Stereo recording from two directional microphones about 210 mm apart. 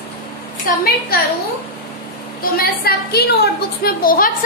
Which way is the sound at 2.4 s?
45° left (ahead or behind).